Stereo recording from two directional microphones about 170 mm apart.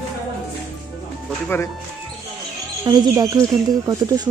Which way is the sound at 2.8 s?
25° right (ahead or behind).